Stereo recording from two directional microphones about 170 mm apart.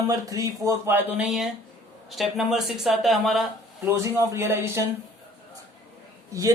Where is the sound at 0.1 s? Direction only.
20° right (ahead or behind); by 3.4 s centre (ahead or behind).